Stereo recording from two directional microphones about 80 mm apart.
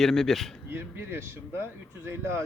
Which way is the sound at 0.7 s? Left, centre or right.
Right.